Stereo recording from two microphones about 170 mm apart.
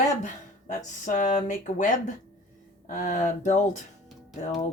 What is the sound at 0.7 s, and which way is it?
Speech, 50° left (ahead or behind).